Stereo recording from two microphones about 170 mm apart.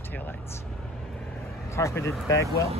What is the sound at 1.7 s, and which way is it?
Speech, 15° left (ahead or behind).